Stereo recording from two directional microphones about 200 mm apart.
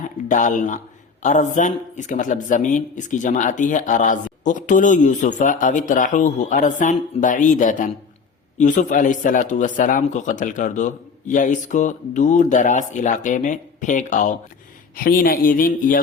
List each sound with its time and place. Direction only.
0.3 s speech: 40° left (ahead or behind)